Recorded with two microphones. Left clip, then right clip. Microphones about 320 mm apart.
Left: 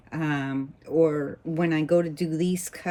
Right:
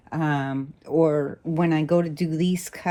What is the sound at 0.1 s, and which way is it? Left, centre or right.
Speech, centre.